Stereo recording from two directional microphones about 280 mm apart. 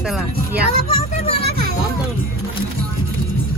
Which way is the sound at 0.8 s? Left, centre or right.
Left.